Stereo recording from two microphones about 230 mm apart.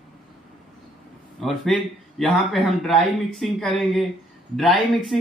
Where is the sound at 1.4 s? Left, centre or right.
Centre.